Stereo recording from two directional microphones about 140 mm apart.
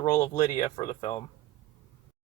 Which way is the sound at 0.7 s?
55° left (ahead or behind).